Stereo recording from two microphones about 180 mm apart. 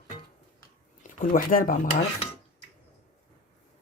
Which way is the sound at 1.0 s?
50° left (ahead or behind).